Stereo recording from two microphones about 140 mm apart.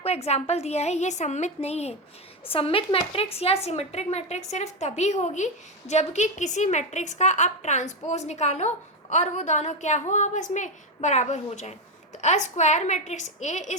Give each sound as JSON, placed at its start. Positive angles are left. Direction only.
{"t": 0.0, "sound": "a woman's voice", "side_deg": 50}